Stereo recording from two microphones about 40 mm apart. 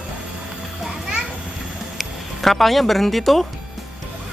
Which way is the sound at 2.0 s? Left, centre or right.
Centre.